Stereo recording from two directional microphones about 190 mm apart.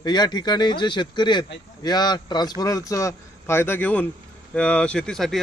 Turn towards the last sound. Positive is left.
turn(degrees=0)  # may be behind; listen again after turning